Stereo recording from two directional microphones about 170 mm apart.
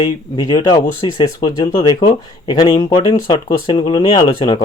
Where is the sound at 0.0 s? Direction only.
30° left (ahead or behind).